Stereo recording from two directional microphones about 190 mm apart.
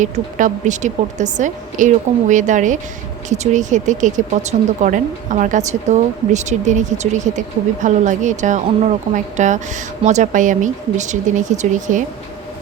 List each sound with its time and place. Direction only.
0.0 s speech: 40° right (ahead or behind)